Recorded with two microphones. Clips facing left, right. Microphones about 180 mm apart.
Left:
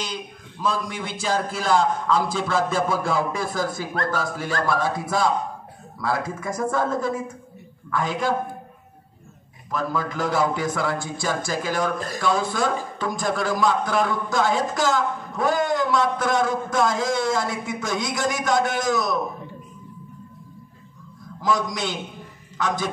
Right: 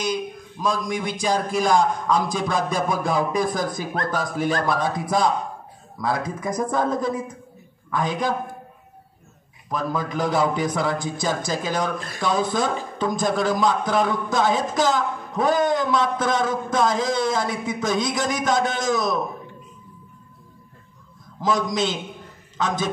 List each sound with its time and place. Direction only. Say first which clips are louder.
0.0 s a man's voice: right 7 dB; 10° right (ahead or behind)
9.7 s a man's voice: even; 20° right (ahead or behind)
21.4 s a man's voice: right 2 dB; 20° right (ahead or behind)